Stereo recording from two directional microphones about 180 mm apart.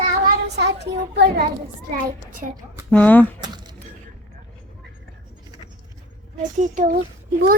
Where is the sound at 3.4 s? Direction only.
25° right (ahead or behind).